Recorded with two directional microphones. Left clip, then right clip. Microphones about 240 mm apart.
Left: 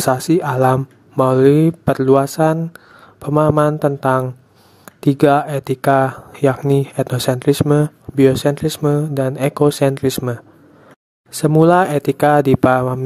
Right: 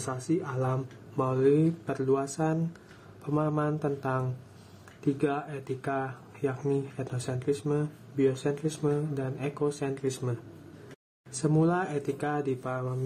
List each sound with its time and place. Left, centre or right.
0.0 s speech: left
11.4 s speech: left